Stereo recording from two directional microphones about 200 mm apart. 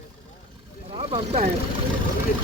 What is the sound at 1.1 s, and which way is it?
Speech, 30° right (ahead or behind).